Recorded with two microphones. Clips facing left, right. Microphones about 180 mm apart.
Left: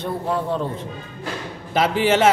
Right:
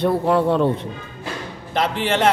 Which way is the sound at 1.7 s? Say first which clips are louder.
Left 3 dB; 5° left (ahead or behind).